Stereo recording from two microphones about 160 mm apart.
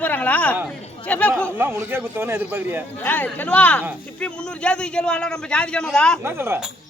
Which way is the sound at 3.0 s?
10° left (ahead or behind).